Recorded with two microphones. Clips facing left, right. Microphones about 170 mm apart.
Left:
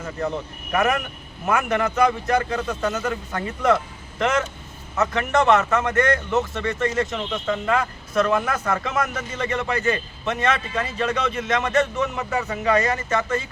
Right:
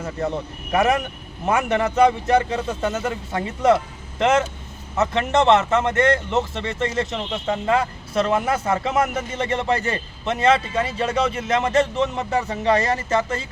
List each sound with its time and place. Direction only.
0.7 s speech: 25° right (ahead or behind)